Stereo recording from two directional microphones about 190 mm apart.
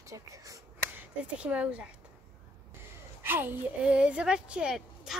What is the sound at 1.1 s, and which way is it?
Speech, 5° right (ahead or behind).